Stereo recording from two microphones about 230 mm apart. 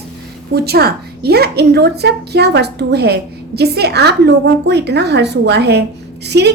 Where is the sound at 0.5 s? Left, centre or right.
Right.